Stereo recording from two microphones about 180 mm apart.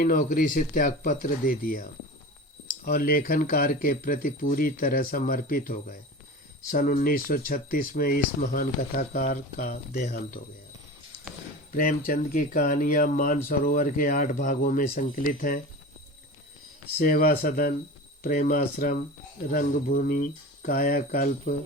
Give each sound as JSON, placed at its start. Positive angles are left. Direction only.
{"t": 0.0, "sound": "speech", "side_deg": 50}
{"t": 11.7, "sound": "speech", "side_deg": 50}
{"t": 17.0, "sound": "speech", "side_deg": 55}